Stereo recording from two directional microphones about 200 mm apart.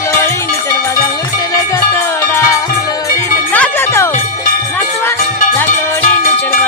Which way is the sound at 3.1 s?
10° left (ahead or behind).